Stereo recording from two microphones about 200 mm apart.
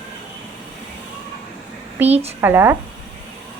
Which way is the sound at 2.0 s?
30° right (ahead or behind).